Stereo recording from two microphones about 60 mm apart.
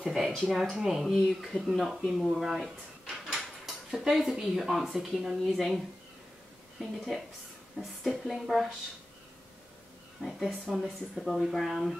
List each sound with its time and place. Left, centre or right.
0.0 s speech: centre
6.8 s speech: centre
10.4 s speech: centre